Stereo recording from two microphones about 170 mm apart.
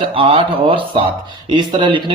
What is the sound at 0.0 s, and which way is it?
A man's voice, 30° right (ahead or behind).